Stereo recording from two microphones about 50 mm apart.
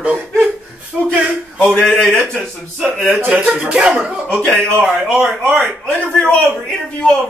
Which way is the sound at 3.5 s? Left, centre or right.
Centre.